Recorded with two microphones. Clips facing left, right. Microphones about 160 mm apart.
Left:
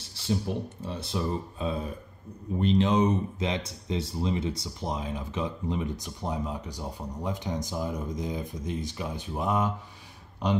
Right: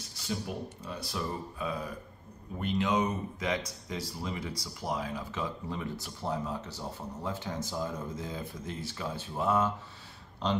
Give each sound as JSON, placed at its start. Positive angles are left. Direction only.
{"t": 0.8, "sound": "speech", "side_deg": 25}